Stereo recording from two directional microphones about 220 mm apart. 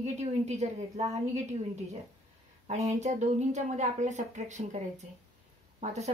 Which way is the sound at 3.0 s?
30° right (ahead or behind).